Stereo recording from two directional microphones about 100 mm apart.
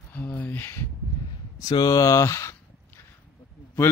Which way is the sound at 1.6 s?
40° left (ahead or behind).